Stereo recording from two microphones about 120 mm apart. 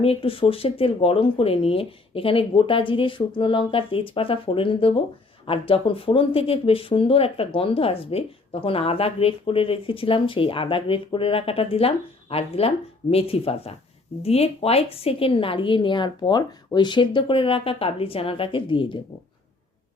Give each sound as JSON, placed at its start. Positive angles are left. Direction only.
{"t": 0.0, "sound": "speech", "side_deg": 50}